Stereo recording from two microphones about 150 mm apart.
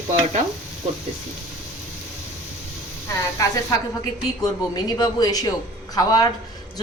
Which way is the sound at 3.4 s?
20° left (ahead or behind).